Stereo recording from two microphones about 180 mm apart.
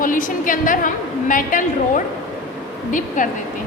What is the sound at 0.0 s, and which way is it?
A woman's voice, 50° left (ahead or behind).